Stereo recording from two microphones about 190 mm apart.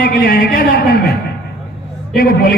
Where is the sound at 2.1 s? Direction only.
50° left (ahead or behind).